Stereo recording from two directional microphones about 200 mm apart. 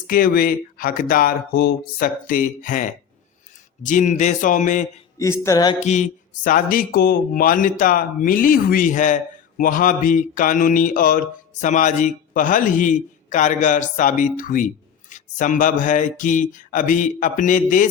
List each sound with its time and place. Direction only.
0.1 s a man's voice: 45° left (ahead or behind)
5.2 s a sound: 15° left (ahead or behind)
5.8 s a man's voice: 35° left (ahead or behind)